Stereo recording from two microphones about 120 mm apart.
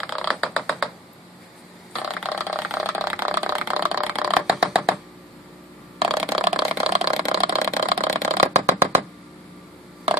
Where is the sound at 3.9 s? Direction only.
5° right (ahead or behind).